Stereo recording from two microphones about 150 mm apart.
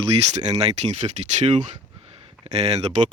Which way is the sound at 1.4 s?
50° right (ahead or behind).